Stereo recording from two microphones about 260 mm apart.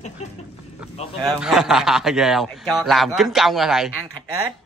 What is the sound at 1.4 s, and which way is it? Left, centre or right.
A man's voice, centre.